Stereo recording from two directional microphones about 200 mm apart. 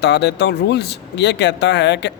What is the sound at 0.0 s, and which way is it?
Speech, 60° left (ahead or behind).